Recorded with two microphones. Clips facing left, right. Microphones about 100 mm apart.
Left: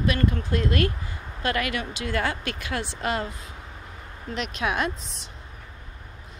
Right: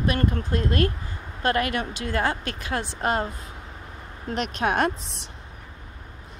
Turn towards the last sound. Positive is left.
turn(degrees=-50)  # may be behind; listen again after turning